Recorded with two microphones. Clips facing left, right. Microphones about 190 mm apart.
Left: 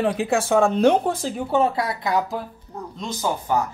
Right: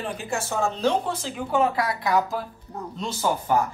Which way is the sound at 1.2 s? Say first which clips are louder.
Left 3 dB; 40° left (ahead or behind).